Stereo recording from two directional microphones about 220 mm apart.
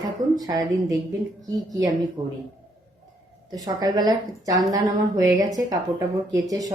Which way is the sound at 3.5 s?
15° right (ahead or behind).